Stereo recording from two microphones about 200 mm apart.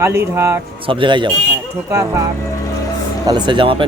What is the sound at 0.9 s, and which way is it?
Speech, 25° right (ahead or behind).